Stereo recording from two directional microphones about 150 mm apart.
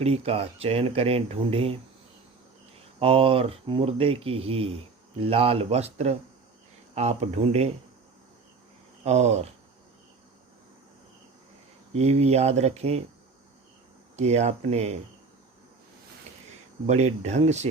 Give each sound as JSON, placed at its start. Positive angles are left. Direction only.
{"t": 0.0, "sound": "speech", "side_deg": -45}
{"t": 3.0, "sound": "speech", "side_deg": -40}
{"t": 9.0, "sound": "speech", "side_deg": -50}
{"t": 11.9, "sound": "speech", "side_deg": -45}
{"t": 14.2, "sound": "speech", "side_deg": -45}
{"t": 16.8, "sound": "speech", "side_deg": -45}